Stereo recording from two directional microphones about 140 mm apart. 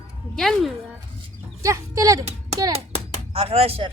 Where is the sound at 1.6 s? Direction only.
20° right (ahead or behind).